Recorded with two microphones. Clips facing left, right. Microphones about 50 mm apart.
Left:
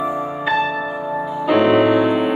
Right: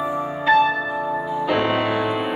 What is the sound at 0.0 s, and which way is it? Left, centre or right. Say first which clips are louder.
Music: left 1 dB; centre.